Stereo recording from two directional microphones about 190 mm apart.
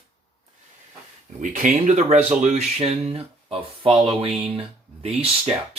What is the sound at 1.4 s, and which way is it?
Speech, 40° right (ahead or behind).